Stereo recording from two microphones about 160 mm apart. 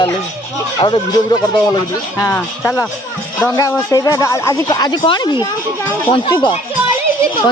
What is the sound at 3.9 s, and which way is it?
Speech, 25° left (ahead or behind).